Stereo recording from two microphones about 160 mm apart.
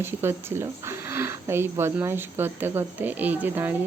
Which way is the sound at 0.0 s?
15° right (ahead or behind).